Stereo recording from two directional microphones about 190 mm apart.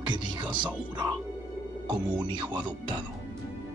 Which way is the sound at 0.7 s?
10° right (ahead or behind).